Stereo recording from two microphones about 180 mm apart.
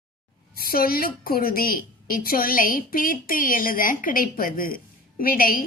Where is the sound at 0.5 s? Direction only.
55° left (ahead or behind).